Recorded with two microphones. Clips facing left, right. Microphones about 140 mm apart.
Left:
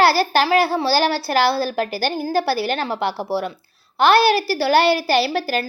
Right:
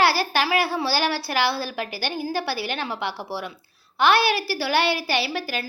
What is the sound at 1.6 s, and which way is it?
A woman's voice, 40° left (ahead or behind).